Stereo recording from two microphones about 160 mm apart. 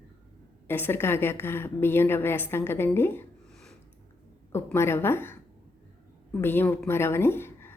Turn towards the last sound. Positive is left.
turn(degrees=15)  # may be behind; listen again after turning